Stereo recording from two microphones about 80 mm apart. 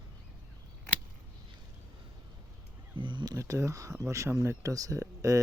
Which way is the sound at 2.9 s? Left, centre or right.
Right.